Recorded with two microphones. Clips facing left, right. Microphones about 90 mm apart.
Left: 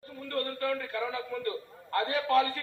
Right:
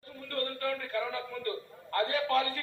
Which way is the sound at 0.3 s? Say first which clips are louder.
Left 2 dB; 25° left (ahead or behind).